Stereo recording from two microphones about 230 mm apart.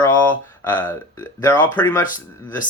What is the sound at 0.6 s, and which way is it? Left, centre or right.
Speech, centre.